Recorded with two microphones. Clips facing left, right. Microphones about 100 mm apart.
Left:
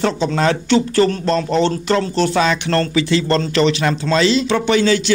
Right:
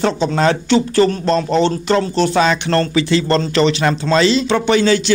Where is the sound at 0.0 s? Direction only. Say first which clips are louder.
Right 2 dB; 25° right (ahead or behind).